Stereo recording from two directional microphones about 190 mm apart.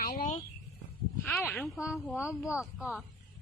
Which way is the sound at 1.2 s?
5° left (ahead or behind).